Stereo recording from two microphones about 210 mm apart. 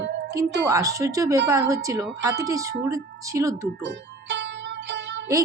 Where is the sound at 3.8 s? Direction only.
55° right (ahead or behind).